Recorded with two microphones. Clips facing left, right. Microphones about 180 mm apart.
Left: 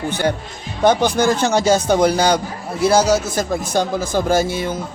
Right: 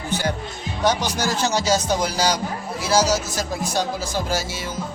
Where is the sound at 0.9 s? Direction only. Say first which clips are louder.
Left 7 dB; 55° left (ahead or behind).